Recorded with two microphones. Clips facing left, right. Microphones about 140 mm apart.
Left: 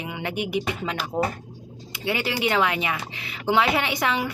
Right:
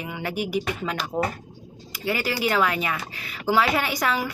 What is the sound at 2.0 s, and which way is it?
Speech, 20° left (ahead or behind).